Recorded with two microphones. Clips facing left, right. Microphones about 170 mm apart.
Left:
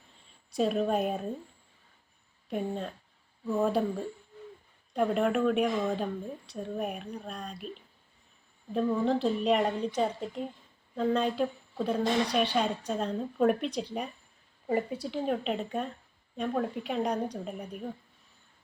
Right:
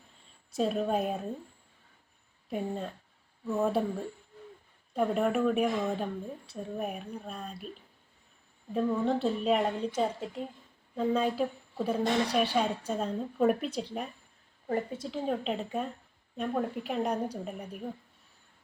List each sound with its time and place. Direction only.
0.5 s a woman's voice: centre (ahead or behind)
2.5 s a woman's voice: centre (ahead or behind)